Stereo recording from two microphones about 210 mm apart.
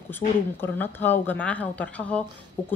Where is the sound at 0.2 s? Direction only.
40° left (ahead or behind).